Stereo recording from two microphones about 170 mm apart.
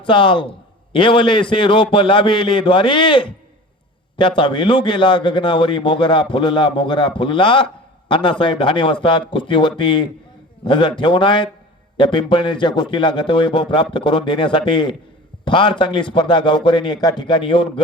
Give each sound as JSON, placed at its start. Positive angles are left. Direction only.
{"t": 0.0, "sound": "speech", "side_deg": 30}